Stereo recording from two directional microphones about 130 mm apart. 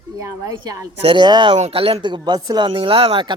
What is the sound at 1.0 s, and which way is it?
Speech, 40° right (ahead or behind).